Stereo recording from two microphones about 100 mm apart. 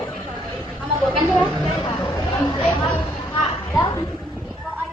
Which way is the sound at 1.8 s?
45° left (ahead or behind).